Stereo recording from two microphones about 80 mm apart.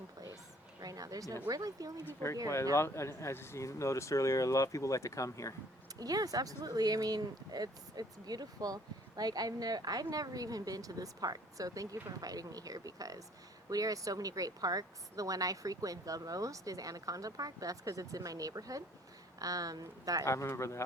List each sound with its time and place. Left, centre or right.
0.8 s speech: right
2.0 s speech: left
6.0 s speech: right
20.2 s speech: left